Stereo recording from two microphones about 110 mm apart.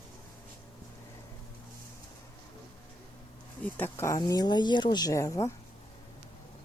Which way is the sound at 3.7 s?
20° left (ahead or behind).